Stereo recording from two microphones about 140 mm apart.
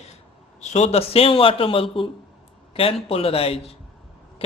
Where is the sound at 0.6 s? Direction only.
55° left (ahead or behind).